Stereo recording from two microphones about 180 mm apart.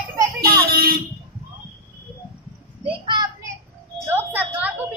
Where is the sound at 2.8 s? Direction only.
25° right (ahead or behind).